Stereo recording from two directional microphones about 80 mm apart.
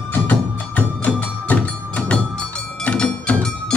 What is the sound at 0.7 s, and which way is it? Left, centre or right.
Music, centre.